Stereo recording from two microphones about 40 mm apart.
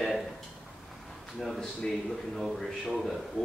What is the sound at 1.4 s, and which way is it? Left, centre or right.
A man's voice, centre.